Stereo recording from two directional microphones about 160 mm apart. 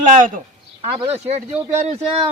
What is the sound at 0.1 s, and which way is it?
Speech, 50° right (ahead or behind).